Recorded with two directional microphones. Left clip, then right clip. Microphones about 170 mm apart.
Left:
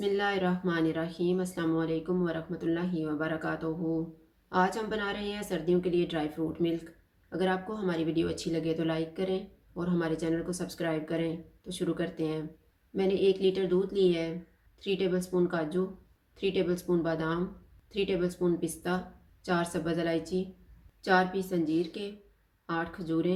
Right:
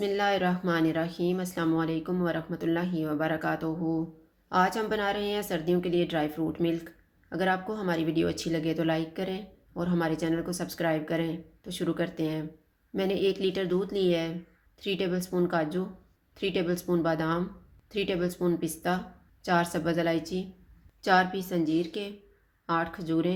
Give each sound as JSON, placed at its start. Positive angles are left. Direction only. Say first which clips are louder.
{"t": 0.0, "sound": "speech", "louder": "right 3 dB", "side_deg": -45}